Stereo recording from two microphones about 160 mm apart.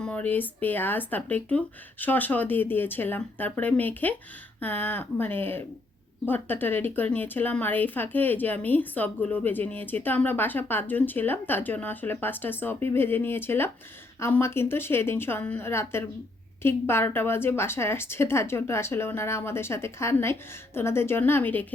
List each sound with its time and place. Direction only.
0.0 s a woman's voice: 10° left (ahead or behind)